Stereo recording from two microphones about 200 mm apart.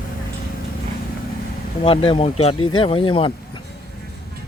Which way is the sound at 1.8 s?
25° left (ahead or behind).